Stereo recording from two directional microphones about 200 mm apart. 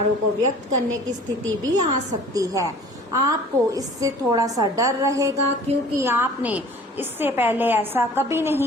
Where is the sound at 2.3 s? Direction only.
15° right (ahead or behind).